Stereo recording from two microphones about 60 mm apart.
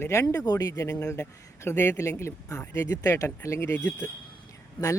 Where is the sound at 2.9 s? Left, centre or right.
Left.